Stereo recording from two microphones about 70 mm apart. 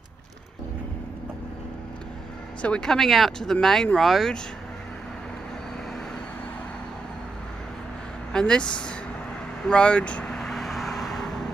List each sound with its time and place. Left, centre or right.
2.6 s speech: centre
8.3 s speech: centre
10.3 s vehicle: centre